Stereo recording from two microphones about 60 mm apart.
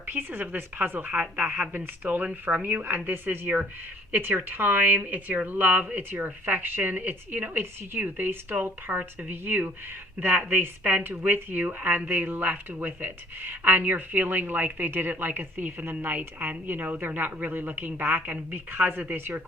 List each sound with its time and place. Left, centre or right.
0.1 s speech: right
1.2 s a woman's voice: centre
1.7 s speech: right